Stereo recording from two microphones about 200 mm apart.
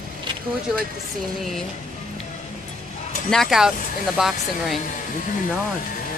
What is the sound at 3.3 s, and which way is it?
Speech, centre (ahead or behind).